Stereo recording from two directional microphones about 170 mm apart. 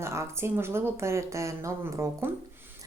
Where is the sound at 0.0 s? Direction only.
15° right (ahead or behind).